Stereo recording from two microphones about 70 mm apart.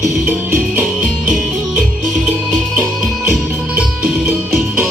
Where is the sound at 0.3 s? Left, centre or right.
Right.